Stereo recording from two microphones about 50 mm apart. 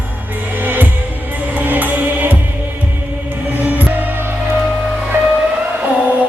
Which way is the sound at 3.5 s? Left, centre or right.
Right.